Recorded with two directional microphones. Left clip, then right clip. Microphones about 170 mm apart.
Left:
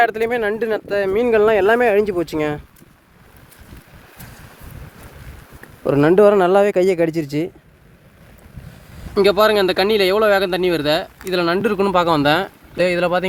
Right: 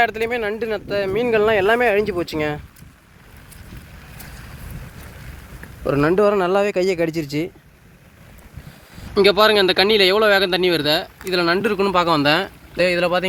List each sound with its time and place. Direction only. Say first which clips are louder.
0.0 s speech: left 3 dB; 35° left (ahead or behind)
5.8 s speech: left 4 dB; 65° left (ahead or behind); by 7.5 s 25° left (ahead or behind)
9.1 s speech: even; 5° left (ahead or behind); by 13.2 s 25° left (ahead or behind)